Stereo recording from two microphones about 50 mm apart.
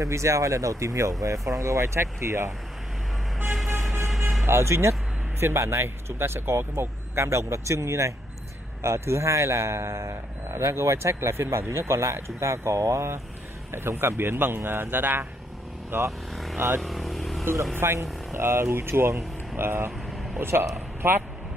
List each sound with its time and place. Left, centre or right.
0.0 s a man's voice: right
4.5 s speech: right
7.2 s a man's voice: right
8.8 s a man's voice: right
13.7 s a man's voice: right
16.8 s vehicle: centre
17.8 s a man's voice: right
18.3 s a man's voice: right
20.7 s a sound: right